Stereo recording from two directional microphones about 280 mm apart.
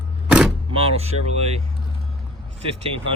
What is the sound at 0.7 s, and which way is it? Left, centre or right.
Speech, centre.